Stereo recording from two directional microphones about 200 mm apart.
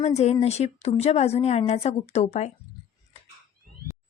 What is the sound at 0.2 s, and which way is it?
Speech, 30° left (ahead or behind).